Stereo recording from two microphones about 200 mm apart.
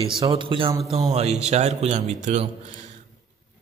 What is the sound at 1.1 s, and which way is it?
Mantra, 35° right (ahead or behind).